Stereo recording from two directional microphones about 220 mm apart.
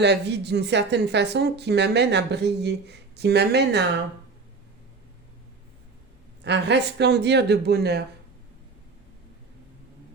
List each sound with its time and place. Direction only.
0.0 s speech: 50° right (ahead or behind)
6.4 s speech: 50° right (ahead or behind)